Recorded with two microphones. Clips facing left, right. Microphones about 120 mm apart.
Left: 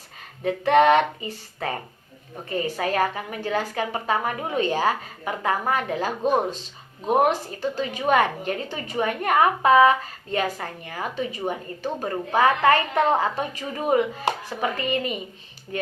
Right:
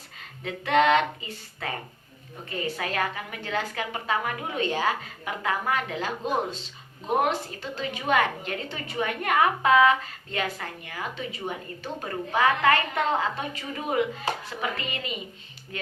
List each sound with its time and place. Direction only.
0.4 s a woman's voice: 45° left (ahead or behind)
2.3 s a woman's voice: 40° left (ahead or behind)
7.8 s a woman's voice: 40° left (ahead or behind)